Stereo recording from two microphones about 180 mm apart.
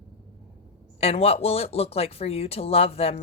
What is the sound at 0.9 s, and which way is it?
A woman's voice, 35° left (ahead or behind).